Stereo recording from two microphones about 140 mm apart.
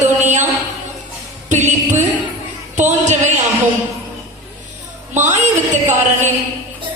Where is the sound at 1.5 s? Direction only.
60° right (ahead or behind).